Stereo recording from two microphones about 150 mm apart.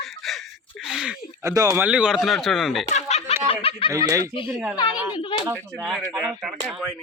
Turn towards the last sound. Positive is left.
turn(degrees=0)  # may be behind; listen again after turning